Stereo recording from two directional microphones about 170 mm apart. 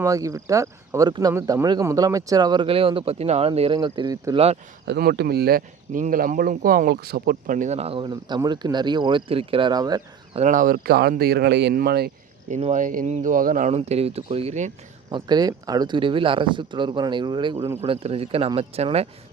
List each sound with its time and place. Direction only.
0.0 s speech: 20° right (ahead or behind)
4.9 s speech: 70° right (ahead or behind); by 10.0 s 25° right (ahead or behind)
10.3 s speech: 45° right (ahead or behind); by 12.1 s 65° right (ahead or behind)
12.5 s speech: 45° right (ahead or behind)
13.7 s speech: 40° right (ahead or behind)
15.1 s speech: 25° right (ahead or behind)